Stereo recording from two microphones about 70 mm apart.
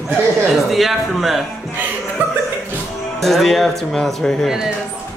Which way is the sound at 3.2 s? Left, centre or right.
Centre.